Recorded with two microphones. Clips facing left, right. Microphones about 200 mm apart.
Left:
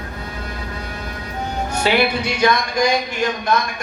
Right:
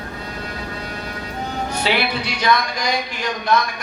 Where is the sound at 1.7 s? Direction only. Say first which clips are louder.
Left 4 dB; 45° left (ahead or behind).